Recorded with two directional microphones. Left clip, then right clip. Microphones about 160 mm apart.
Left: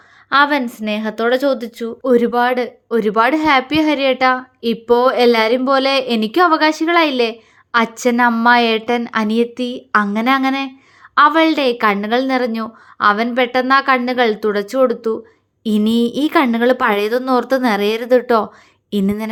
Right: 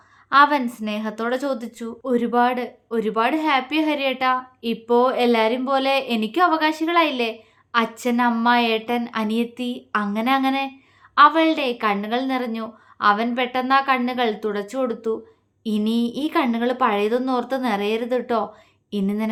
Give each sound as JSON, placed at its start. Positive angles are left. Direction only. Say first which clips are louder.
{"t": 0.3, "sound": "a woman's voice", "louder": "left 2 dB", "side_deg": 25}
{"t": 2.0, "sound": "a woman's voice", "louder": "left 6 dB", "side_deg": 35}